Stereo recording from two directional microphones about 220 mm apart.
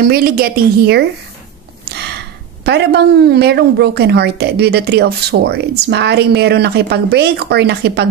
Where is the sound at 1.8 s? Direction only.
45° right (ahead or behind).